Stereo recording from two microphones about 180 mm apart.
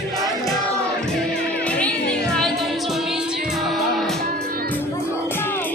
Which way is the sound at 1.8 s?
5° left (ahead or behind).